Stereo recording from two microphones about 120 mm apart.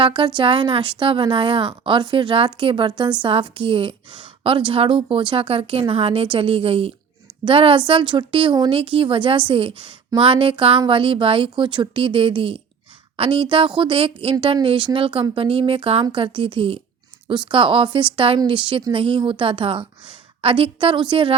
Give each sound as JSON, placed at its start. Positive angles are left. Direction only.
{"t": 0.0, "sound": "speech", "side_deg": -45}